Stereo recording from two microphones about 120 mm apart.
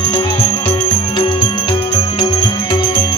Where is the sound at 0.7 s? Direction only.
45° left (ahead or behind).